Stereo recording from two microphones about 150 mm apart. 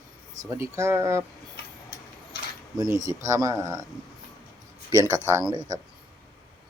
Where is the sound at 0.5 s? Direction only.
20° right (ahead or behind).